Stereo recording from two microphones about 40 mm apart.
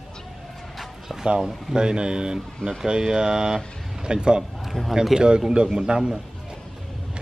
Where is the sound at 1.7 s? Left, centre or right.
Right.